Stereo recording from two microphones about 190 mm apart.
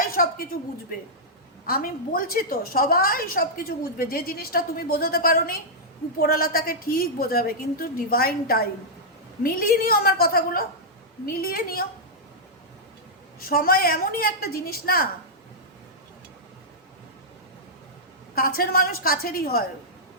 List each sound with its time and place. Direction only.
0.1 s a sound: 50° left (ahead or behind)
1.6 s a woman's voice: 50° left (ahead or behind)
13.4 s a woman's voice: 50° left (ahead or behind)
18.3 s a woman's voice: 50° left (ahead or behind)